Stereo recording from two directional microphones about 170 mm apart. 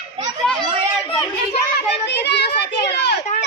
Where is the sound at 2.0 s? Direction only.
85° left.